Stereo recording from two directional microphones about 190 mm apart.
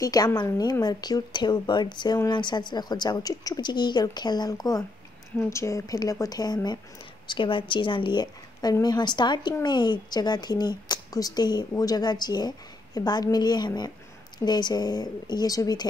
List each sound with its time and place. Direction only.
0.0 s a woman's voice: 20° left (ahead or behind)